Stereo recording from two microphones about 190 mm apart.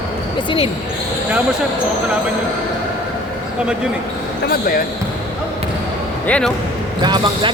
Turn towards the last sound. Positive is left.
turn(degrees=-25)  # may be behind; listen again after turning